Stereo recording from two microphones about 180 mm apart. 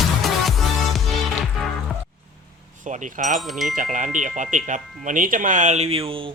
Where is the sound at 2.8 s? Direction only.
45° right (ahead or behind).